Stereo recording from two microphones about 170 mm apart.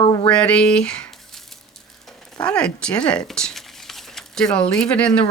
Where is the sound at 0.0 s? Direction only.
30° left (ahead or behind).